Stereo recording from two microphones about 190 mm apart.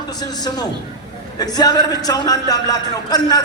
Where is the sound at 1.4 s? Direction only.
20° left (ahead or behind).